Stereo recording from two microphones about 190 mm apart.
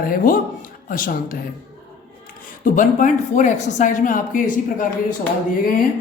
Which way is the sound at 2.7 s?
45° left (ahead or behind).